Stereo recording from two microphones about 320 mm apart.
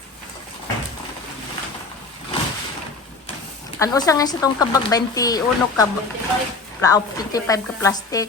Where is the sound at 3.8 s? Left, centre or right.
Centre.